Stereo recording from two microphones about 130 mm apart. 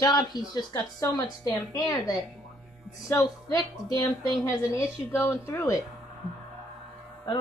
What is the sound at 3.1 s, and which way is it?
Speech, 25° left (ahead or behind).